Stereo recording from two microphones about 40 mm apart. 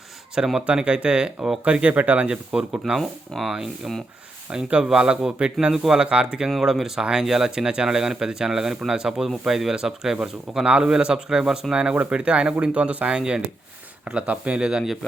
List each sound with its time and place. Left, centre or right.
0.4 s a man's voice: centre
0.7 s a man's voice: right
1.8 s speech: right
2.3 s a man's voice: right
3.0 s speech: centre
4.5 s a man's voice: centre
6.0 s a man's voice: right
6.6 s a man's voice: centre
10.7 s a man's voice: right
13.1 s a man's voice: right
14.3 s speech: right
14.6 s a man's voice: centre